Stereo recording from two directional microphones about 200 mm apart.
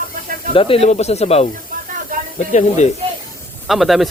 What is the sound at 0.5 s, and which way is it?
Speech, 25° left (ahead or behind).